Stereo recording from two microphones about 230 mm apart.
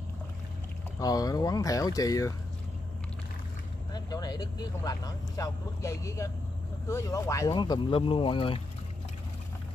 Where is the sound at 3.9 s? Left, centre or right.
Centre.